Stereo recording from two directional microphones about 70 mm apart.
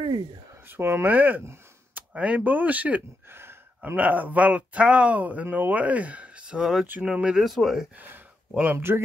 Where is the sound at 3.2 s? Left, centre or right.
Right.